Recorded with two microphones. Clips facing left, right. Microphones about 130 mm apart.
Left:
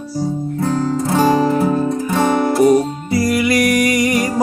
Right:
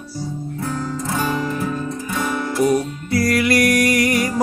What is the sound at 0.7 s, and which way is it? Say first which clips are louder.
Music: left 8 dB; 35° left (ahead or behind).